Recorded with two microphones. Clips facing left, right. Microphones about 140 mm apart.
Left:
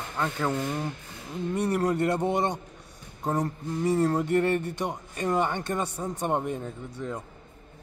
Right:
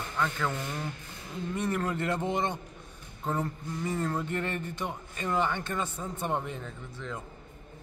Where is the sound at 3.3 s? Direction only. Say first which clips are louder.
Left 4 dB; 40° left (ahead or behind).